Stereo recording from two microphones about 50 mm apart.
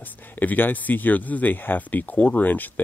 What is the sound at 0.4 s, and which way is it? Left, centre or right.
Speech, left.